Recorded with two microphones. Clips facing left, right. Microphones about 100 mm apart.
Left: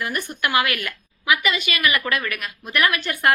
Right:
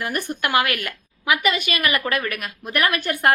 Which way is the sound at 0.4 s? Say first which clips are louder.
Even; 45° right (ahead or behind).